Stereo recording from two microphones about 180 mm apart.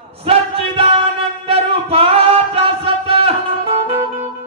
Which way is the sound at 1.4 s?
30° right (ahead or behind).